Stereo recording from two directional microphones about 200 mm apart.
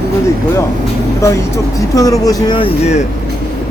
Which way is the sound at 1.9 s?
15° left (ahead or behind).